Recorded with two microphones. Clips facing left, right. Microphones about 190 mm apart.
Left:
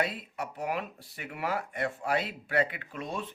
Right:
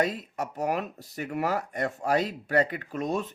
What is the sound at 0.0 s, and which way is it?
Speech, 45° right (ahead or behind).